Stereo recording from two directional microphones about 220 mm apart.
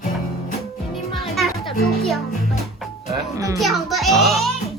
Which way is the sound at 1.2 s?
Centre (ahead or behind).